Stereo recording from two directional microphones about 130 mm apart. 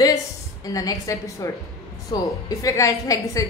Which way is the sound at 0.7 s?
25° left (ahead or behind).